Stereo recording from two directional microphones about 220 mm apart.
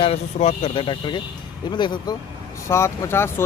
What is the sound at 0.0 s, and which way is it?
Speech, 30° left (ahead or behind).